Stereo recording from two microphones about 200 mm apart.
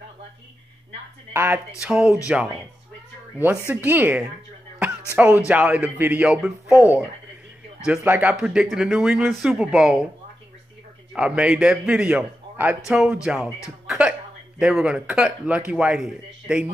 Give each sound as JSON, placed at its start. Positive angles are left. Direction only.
{"t": 1.3, "sound": "a man's voice", "side_deg": -10}
{"t": 3.3, "sound": "speech", "side_deg": -10}
{"t": 7.8, "sound": "a man's voice", "side_deg": -10}
{"t": 11.1, "sound": "a man's voice", "side_deg": -5}
{"t": 13.8, "sound": "music", "side_deg": -5}
{"t": 14.6, "sound": "a man's voice", "side_deg": -5}